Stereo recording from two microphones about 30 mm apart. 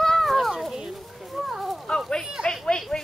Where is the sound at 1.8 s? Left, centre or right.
Left.